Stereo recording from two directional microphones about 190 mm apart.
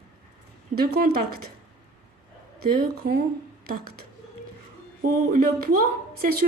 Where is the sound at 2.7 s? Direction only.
55° right (ahead or behind).